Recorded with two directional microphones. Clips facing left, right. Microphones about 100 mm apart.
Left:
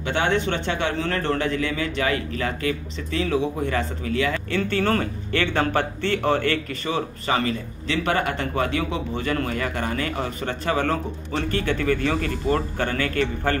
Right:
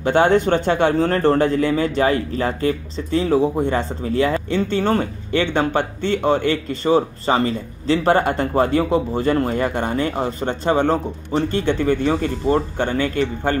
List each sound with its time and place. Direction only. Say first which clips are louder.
0.0 s speech: right 7 dB; 40° right (ahead or behind)
4.5 s speech: right 3 dB; 20° right (ahead or behind)
6.8 s speech: right 9 dB; 30° right (ahead or behind)